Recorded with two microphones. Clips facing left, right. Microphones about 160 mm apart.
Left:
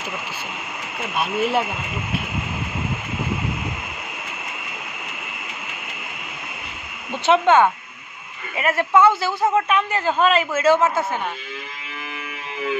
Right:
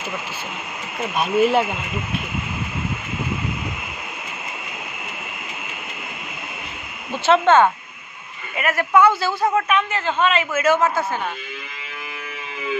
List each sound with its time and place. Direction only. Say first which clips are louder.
1.1 s speech: right 4 dB; centre (ahead or behind)
7.2 s speech: right 1 dB; 15° left (ahead or behind)
8.5 s a woman's voice: even; 25° left (ahead or behind)
10.2 s a woman's voice: left 1 dB; 35° left (ahead or behind)